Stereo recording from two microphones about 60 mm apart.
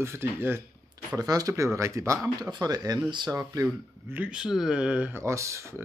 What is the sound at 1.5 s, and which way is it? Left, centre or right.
Speech, right.